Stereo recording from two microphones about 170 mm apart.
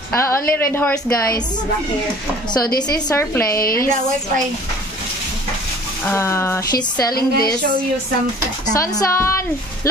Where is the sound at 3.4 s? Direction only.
60° left (ahead or behind).